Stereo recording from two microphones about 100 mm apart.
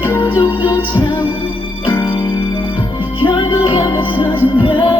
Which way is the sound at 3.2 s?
55° left (ahead or behind).